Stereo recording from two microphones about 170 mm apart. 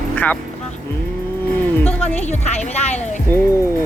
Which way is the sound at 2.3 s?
40° left (ahead or behind).